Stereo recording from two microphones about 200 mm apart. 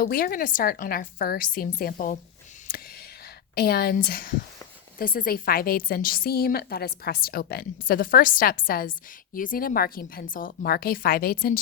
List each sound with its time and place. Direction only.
0.0 s a woman's voice: 45° left (ahead or behind)
3.5 s a woman's voice: 50° left (ahead or behind)